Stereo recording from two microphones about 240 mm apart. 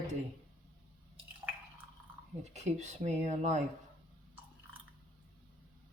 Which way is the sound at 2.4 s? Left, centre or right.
Right.